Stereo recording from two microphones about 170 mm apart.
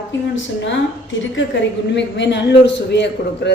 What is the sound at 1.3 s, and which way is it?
A woman's voice, 90° left.